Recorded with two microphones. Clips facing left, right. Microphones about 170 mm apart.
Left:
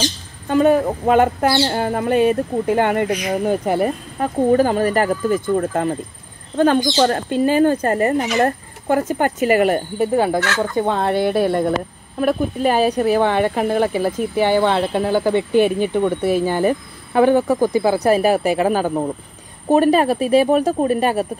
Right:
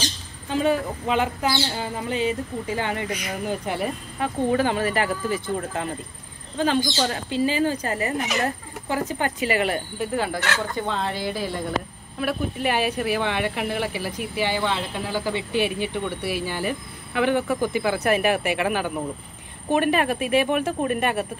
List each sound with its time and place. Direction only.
0.5 s speech: 50° left (ahead or behind)
1.4 s speech: 60° left (ahead or behind)
12.2 s speech: 45° left (ahead or behind)